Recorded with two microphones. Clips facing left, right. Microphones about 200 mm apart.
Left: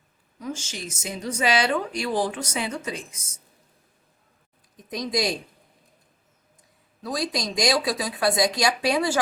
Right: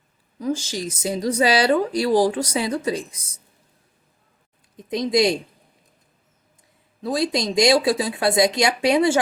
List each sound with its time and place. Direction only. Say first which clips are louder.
0.3 s speech: right 8 dB; 35° right (ahead or behind)
4.9 s speech: right 7 dB; 25° right (ahead or behind)
7.0 s speech: right 6 dB; 25° right (ahead or behind)